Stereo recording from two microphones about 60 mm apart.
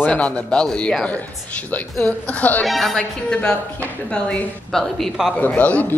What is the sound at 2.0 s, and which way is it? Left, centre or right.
Speech, left.